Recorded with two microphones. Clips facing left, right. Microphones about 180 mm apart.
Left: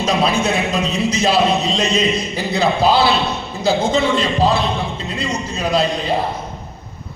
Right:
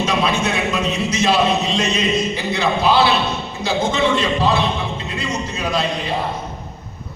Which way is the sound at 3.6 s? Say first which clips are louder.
Left 3 dB; 30° left (ahead or behind).